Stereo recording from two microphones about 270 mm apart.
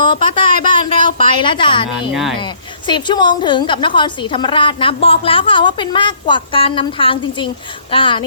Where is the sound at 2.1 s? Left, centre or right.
Centre.